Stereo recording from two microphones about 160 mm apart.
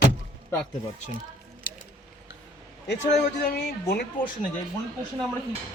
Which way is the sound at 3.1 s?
85° left.